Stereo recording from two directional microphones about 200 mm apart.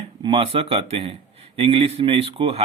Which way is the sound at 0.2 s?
25° right (ahead or behind).